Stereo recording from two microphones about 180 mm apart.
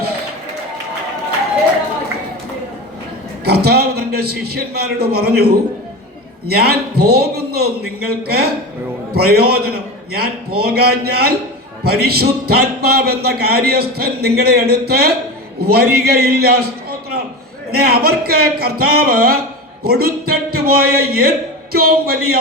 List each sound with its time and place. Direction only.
3.4 s a man's voice: 60° right (ahead or behind)